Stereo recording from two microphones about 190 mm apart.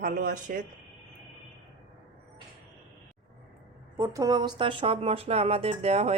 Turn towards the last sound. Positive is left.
turn(degrees=-35)  # may be behind; listen again after turning